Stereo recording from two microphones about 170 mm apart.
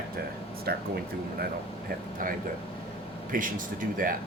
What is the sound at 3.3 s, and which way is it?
Speech, 55° right (ahead or behind).